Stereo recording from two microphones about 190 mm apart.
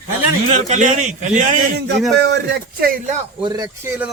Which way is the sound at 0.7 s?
40° right (ahead or behind).